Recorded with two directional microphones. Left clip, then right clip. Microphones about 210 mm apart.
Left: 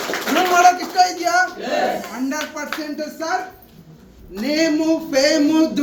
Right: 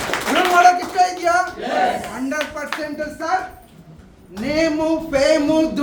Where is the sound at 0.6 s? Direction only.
20° right (ahead or behind).